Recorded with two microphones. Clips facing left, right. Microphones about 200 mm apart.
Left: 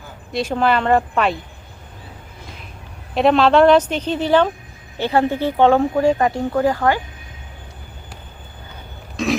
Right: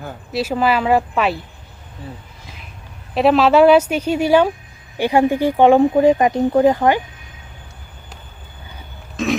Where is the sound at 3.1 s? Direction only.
5° right (ahead or behind); by 7.0 s 20° right (ahead or behind).